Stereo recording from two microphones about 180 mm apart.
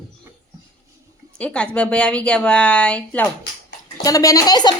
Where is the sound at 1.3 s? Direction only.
5° left (ahead or behind).